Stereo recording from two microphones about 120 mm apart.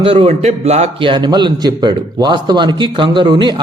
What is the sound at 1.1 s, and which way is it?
Speech, 35° right (ahead or behind).